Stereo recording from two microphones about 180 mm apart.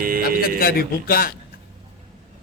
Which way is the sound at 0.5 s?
55° left (ahead or behind).